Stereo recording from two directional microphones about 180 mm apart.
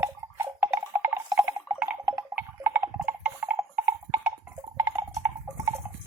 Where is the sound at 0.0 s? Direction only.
10° right (ahead or behind).